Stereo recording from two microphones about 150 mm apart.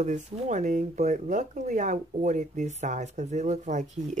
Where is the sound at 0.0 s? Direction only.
55° right (ahead or behind).